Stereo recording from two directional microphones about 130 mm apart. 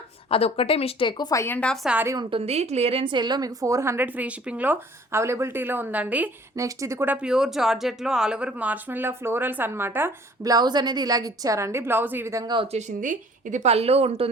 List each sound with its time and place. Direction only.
0.3 s speech: 50° left (ahead or behind)
1.4 s a woman's voice: 15° left (ahead or behind)
1.7 s a woman's voice: centre (ahead or behind)
2.3 s a woman's voice: 50° right (ahead or behind); by 6.3 s 10° right (ahead or behind)
6.6 s speech: 25° right (ahead or behind)
10.4 s a woman's voice: 30° right (ahead or behind)
12.7 s speech: 85° right; by 14.3 s 50° right (ahead or behind)